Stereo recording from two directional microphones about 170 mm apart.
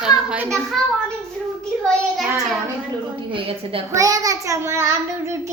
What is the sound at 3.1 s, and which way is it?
Speech, 30° right (ahead or behind).